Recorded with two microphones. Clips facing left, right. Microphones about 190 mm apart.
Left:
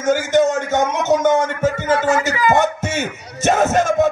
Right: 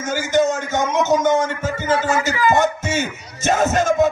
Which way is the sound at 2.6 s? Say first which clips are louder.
Even; 60° left (ahead or behind).